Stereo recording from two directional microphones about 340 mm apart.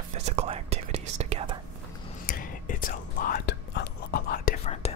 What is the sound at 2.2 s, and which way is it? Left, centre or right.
Whispering, left.